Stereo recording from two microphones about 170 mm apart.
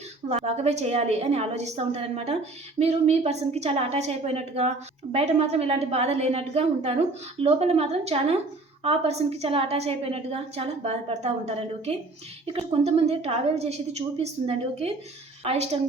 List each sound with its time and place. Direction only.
0.3 s a woman's voice: 40° right (ahead or behind)